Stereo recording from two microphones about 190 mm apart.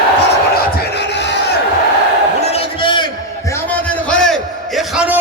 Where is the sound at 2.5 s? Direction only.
25° left (ahead or behind).